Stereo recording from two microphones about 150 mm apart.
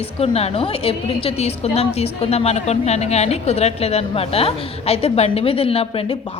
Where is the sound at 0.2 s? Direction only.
40° left (ahead or behind).